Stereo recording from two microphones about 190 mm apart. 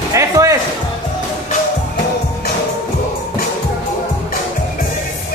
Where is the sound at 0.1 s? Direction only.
15° right (ahead or behind).